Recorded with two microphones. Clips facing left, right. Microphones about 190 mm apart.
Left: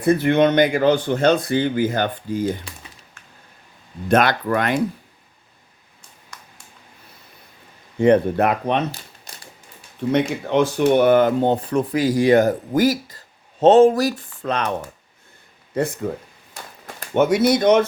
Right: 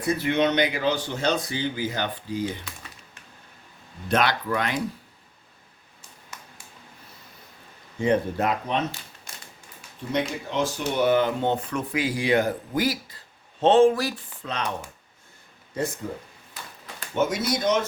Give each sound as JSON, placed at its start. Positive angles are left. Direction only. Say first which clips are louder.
{"t": 0.0, "sound": "speech", "louder": "left 7 dB", "side_deg": 55}
{"t": 4.1, "sound": "speech", "louder": "left 6 dB", "side_deg": 50}
{"t": 6.3, "sound": "a sound", "louder": "even", "side_deg": -5}
{"t": 7.9, "sound": "speech", "louder": "left 8 dB", "side_deg": 60}
{"t": 10.1, "sound": "speech", "louder": "left 8 dB", "side_deg": 60}
{"t": 15.8, "sound": "speech", "louder": "left 6 dB", "side_deg": 60}